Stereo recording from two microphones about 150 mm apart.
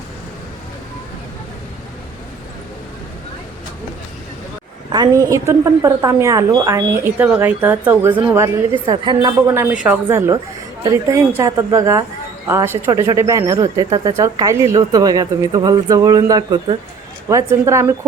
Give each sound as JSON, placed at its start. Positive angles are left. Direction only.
{"t": 4.9, "sound": "a woman's voice", "side_deg": -25}
{"t": 8.9, "sound": "speech", "side_deg": -25}
{"t": 9.8, "sound": "a woman's voice", "side_deg": -15}